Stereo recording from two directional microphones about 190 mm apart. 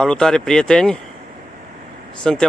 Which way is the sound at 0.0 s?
5° left (ahead or behind).